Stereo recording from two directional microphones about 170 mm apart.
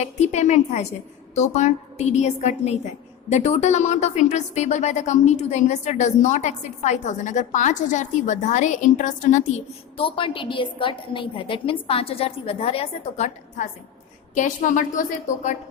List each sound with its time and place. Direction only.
0.0 s a woman's voice: 40° left (ahead or behind)
10.0 s a woman's voice: 30° left (ahead or behind); by 15.0 s 50° left (ahead or behind)